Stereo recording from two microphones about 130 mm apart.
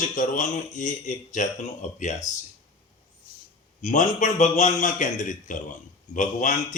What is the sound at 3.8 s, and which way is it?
A man's voice, 70° left (ahead or behind).